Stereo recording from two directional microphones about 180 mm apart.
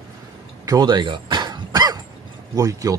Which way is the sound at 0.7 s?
25° right (ahead or behind).